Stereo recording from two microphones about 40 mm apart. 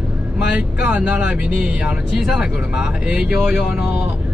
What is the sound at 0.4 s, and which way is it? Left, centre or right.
Speech, right.